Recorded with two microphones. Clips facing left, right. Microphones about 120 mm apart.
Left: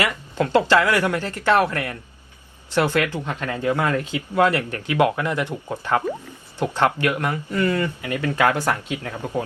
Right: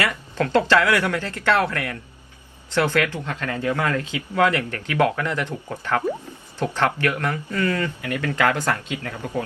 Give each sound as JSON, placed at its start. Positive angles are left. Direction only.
{"t": 0.0, "sound": "speech", "side_deg": 15}